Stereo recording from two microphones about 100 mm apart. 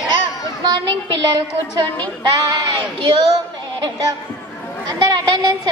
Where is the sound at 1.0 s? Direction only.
50° right (ahead or behind).